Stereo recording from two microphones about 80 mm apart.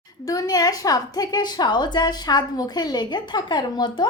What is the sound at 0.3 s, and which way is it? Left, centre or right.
A woman's voice, left.